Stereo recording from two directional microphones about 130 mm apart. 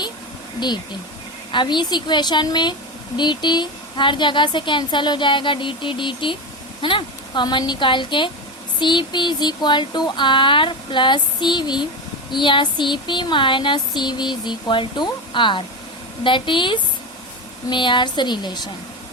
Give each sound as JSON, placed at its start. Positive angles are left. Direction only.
{"t": 1.5, "sound": "speech", "side_deg": 35}